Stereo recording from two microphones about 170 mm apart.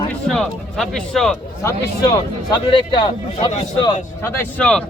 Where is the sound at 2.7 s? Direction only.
25° left (ahead or behind).